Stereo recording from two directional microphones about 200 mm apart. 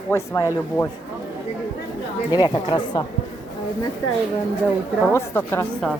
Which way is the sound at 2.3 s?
20° left (ahead or behind).